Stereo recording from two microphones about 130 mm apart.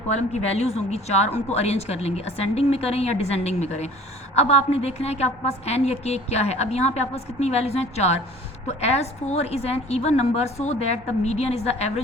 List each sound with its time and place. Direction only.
0.2 s a woman's voice: 55° left (ahead or behind)